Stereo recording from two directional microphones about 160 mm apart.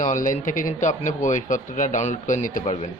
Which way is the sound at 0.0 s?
55° left (ahead or behind).